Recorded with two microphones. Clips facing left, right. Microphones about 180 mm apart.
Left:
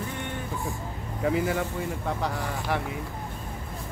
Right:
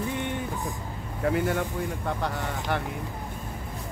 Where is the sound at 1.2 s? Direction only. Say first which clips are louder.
Even; centre (ahead or behind).